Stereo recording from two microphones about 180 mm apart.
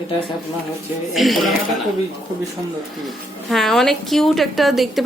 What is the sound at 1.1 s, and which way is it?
Speech, centre (ahead or behind).